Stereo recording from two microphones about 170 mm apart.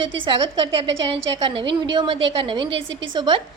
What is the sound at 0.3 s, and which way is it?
A woman's voice, 30° right (ahead or behind).